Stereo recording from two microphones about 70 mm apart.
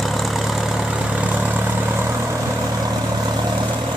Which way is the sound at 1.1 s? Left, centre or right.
Centre.